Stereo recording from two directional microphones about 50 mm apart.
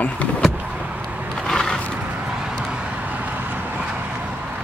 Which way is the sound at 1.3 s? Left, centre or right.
Centre.